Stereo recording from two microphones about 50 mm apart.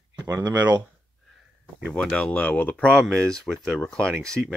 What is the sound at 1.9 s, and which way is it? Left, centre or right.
Speech, centre.